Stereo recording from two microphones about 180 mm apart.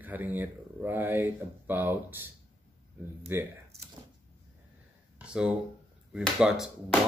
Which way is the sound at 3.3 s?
10° right (ahead or behind).